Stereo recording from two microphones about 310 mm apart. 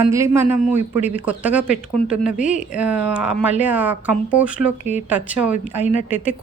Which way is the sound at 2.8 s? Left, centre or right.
Centre.